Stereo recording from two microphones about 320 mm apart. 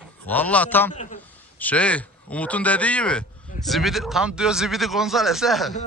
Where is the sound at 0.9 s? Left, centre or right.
Left.